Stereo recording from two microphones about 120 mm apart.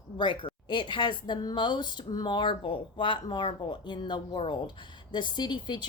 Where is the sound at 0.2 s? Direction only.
45° left (ahead or behind).